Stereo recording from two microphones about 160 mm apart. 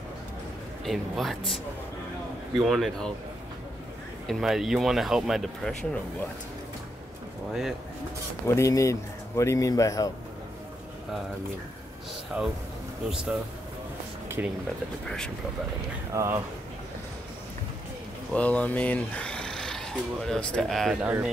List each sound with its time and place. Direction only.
0.8 s speech: centre (ahead or behind)
2.5 s speech: centre (ahead or behind)
4.3 s speech: centre (ahead or behind)
8.5 s a man's voice: 20° left (ahead or behind)
12.3 s speech: 5° right (ahead or behind)
15.0 s speech: 5° left (ahead or behind)
16.1 s speech: 20° right (ahead or behind)
18.3 s speech: 10° left (ahead or behind)